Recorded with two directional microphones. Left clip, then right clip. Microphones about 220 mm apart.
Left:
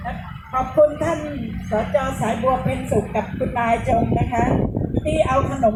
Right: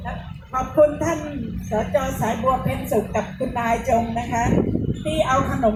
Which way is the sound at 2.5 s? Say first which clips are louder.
Even; 10° right (ahead or behind).